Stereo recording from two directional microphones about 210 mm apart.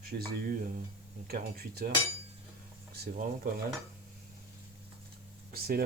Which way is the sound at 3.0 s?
45° right (ahead or behind).